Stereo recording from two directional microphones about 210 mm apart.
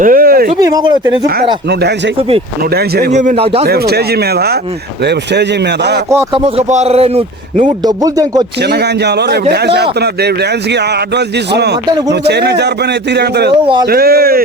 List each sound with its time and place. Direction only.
0.0 s a sound: 40° right (ahead or behind)
0.6 s speech: 20° right (ahead or behind)
2.7 s a man's voice: 50° right (ahead or behind)
3.1 s a man's voice: 35° right (ahead or behind)
3.7 s a man's voice: 50° right (ahead or behind)
6.3 s speech: 30° right (ahead or behind)
7.9 s speech: 20° right (ahead or behind)
8.7 s a man's voice: 50° right (ahead or behind)
12.2 s a man's voice: 50° right (ahead or behind)